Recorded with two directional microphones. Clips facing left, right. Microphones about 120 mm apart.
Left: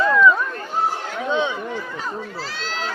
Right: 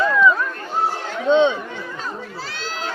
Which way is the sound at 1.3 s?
20° right (ahead or behind).